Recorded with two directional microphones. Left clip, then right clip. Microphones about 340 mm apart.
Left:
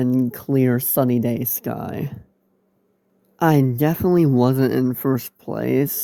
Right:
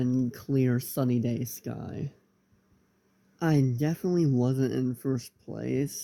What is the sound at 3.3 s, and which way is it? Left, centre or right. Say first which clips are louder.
Speech: left 10 dB; left.